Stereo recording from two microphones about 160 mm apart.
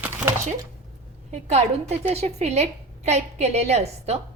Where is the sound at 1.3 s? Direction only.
45° right (ahead or behind).